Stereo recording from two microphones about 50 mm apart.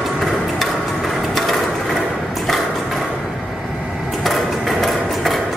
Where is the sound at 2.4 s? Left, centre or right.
Centre.